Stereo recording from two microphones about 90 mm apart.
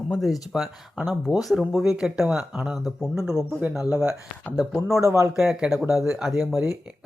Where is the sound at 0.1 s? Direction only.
Centre (ahead or behind).